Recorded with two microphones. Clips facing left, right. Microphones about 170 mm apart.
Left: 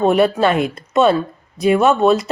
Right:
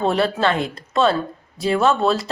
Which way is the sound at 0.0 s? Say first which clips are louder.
Left 5 dB; 15° left (ahead or behind).